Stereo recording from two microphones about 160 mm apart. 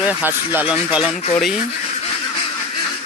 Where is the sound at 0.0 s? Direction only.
10° right (ahead or behind).